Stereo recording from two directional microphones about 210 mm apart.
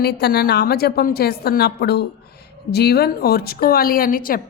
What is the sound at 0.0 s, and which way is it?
A woman's voice, 50° left (ahead or behind).